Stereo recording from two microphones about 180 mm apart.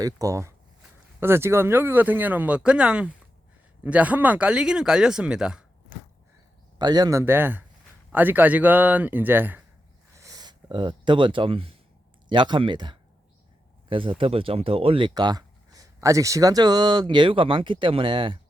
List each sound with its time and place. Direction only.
0.0 s speech: 20° right (ahead or behind)
6.7 s speech: 20° right (ahead or behind)
10.2 s a sound: 20° right (ahead or behind)
12.3 s speech: 25° right (ahead or behind)